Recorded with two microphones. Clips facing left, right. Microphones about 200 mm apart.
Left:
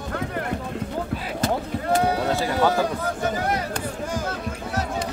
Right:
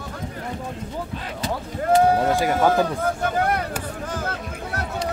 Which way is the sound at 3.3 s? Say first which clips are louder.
Right 1 dB; 55° right (ahead or behind).